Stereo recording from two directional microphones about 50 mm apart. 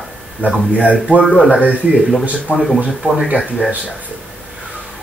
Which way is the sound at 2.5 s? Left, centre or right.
Right.